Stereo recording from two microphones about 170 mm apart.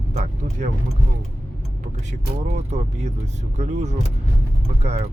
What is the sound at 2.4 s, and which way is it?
Speech, 40° right (ahead or behind).